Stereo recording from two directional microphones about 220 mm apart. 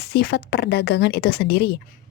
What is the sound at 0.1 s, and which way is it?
A woman's voice, 45° left (ahead or behind).